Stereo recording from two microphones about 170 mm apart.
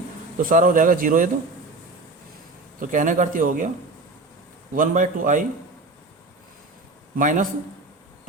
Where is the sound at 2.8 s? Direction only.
50° right (ahead or behind).